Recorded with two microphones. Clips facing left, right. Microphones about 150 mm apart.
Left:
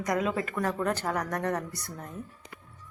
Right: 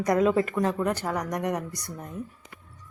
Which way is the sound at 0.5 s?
15° right (ahead or behind).